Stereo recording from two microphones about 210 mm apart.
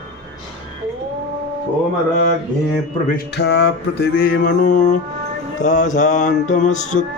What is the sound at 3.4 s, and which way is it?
Music, 55° left (ahead or behind).